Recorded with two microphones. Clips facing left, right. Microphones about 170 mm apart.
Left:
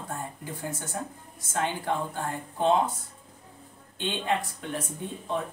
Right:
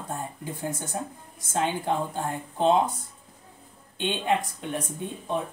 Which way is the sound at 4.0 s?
20° right (ahead or behind).